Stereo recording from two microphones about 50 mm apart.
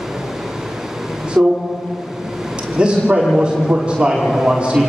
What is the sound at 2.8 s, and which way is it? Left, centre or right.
A man's voice, centre.